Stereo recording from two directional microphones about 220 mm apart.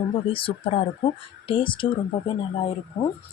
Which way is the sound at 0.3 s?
25° left (ahead or behind).